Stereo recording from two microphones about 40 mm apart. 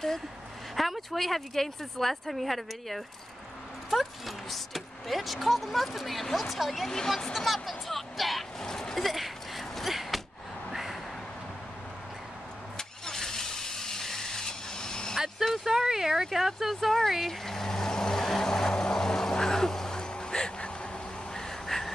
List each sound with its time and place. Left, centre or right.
0.7 s speech: centre
8.5 s door: centre
10.7 s a sound: centre
12.7 s vehicle: centre
15.1 s vehicle: centre
15.5 s speech: centre
17.1 s vehicle: centre